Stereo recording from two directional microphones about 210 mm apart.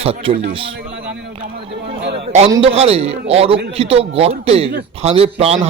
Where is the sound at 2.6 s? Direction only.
30° right (ahead or behind).